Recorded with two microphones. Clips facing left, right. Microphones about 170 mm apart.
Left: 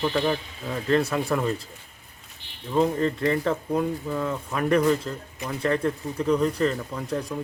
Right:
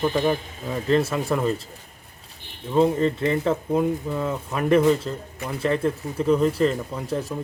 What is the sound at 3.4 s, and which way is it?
Speech, 5° right (ahead or behind).